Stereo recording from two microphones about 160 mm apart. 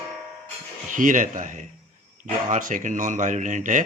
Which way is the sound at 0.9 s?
55° right (ahead or behind).